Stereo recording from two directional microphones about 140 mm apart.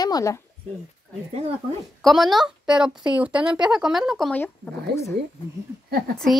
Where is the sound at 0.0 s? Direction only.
25° left (ahead or behind).